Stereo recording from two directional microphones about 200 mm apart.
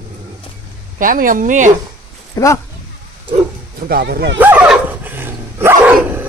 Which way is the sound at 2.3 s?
15° left (ahead or behind).